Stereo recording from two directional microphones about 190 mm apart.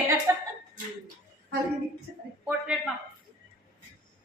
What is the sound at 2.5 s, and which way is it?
Speech, 5° right (ahead or behind).